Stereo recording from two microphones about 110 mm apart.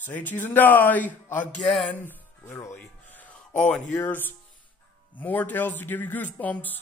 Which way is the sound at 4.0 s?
15° left (ahead or behind).